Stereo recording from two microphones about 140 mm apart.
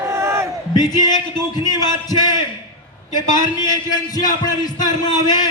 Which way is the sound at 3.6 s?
30° left (ahead or behind).